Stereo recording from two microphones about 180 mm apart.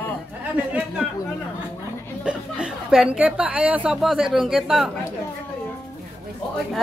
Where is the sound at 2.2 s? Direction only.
5° right (ahead or behind).